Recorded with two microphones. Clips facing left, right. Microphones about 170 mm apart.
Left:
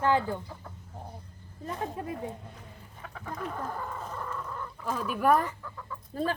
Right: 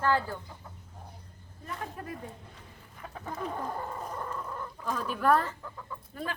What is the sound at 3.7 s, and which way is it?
Chicken, 30° right (ahead or behind).